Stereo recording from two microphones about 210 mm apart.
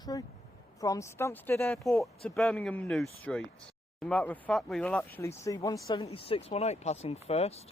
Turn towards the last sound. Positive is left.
turn(degrees=30)  # may be behind; listen again after turning